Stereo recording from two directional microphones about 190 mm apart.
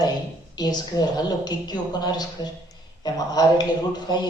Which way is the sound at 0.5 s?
20° left (ahead or behind).